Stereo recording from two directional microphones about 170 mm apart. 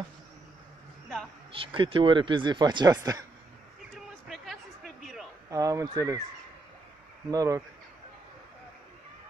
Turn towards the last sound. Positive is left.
turn(degrees=-20)  # may be behind; listen again after turning